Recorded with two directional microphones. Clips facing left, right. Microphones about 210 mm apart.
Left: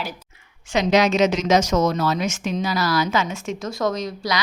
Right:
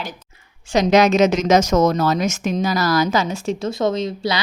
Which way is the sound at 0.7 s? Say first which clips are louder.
Right 4 dB; 45° right (ahead or behind).